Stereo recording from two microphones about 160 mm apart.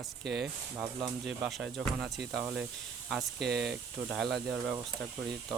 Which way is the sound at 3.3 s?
90° right.